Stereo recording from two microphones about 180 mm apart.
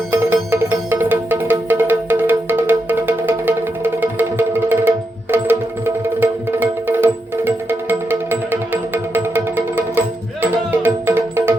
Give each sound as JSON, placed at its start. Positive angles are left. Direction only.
{"t": 0.1, "sound": "music", "side_deg": -10}